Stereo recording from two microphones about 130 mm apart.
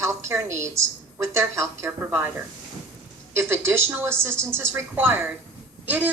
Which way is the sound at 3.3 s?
20° right (ahead or behind).